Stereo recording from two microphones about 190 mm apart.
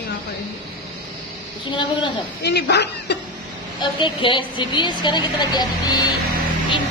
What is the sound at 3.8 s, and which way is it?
Speech, 25° left (ahead or behind).